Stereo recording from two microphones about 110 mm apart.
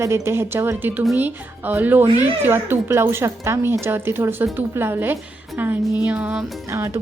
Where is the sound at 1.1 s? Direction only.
15° right (ahead or behind).